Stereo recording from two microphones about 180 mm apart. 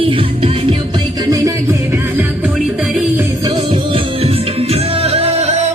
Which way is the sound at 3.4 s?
30° right (ahead or behind).